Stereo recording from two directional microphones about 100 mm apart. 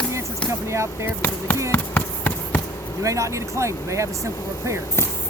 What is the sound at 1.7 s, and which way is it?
Insect, 20° left (ahead or behind).